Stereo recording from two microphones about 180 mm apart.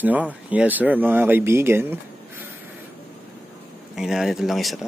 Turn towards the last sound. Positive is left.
turn(degrees=0)  # may be behind; listen again after turning